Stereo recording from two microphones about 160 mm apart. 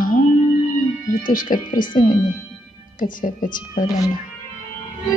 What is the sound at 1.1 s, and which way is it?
Speech, 60° left (ahead or behind).